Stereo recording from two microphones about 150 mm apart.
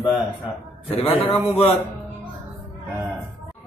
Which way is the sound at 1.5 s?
45° left (ahead or behind).